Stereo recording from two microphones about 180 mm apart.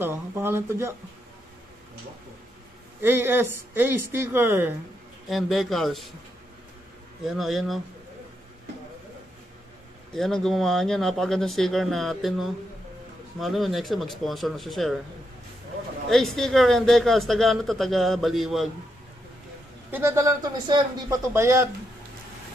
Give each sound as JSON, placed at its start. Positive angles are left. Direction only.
{"t": 0.0, "sound": "speech", "side_deg": -10}
{"t": 3.0, "sound": "speech", "side_deg": -10}
{"t": 5.3, "sound": "speech", "side_deg": 0}
{"t": 7.2, "sound": "speech", "side_deg": 0}
{"t": 10.1, "sound": "speech", "side_deg": 0}
{"t": 16.1, "sound": "speech", "side_deg": 0}
{"t": 19.9, "sound": "speech", "side_deg": -15}